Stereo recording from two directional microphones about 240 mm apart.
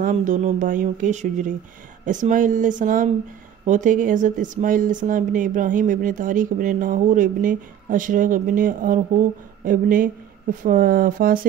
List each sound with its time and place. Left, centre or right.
0.0 s speech: right